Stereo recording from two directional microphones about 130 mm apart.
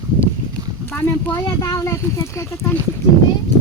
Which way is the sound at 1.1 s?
25° left (ahead or behind).